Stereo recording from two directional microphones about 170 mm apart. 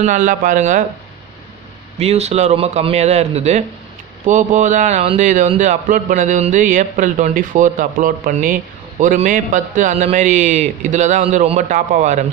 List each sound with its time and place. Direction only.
0.0 s a man's voice: 50° right (ahead or behind)
2.0 s a man's voice: 40° right (ahead or behind)